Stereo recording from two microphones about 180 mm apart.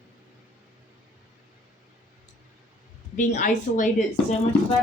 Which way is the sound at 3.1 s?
45° left (ahead or behind).